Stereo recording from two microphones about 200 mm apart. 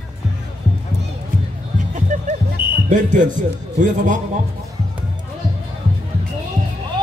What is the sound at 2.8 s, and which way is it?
A man's voice, 40° right (ahead or behind).